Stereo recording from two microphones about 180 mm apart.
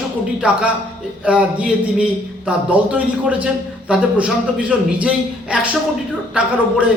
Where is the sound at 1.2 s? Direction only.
5° right (ahead or behind).